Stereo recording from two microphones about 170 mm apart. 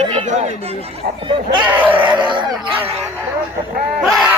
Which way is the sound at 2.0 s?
25° right (ahead or behind).